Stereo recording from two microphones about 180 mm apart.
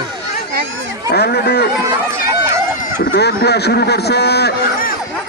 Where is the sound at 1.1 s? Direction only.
60° left (ahead or behind).